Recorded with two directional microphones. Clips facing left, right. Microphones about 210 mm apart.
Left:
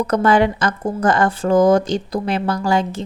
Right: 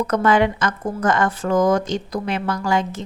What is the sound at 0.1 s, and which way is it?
A woman's voice, 35° left (ahead or behind).